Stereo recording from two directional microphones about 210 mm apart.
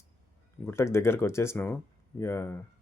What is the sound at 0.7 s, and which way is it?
Speech, 10° left (ahead or behind).